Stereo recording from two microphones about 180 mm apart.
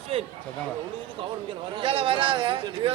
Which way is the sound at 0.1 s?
30° right (ahead or behind).